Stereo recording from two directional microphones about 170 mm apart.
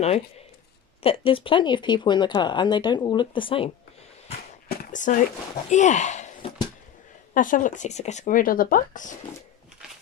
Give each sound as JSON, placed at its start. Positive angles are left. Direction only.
{"t": 1.0, "sound": "speech", "side_deg": 30}
{"t": 4.6, "sound": "a sound", "side_deg": 50}
{"t": 5.7, "sound": "speech", "side_deg": 45}
{"t": 7.3, "sound": "speech", "side_deg": 50}